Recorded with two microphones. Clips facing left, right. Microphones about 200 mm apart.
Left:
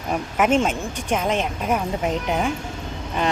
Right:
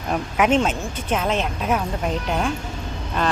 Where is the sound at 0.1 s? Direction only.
5° left (ahead or behind).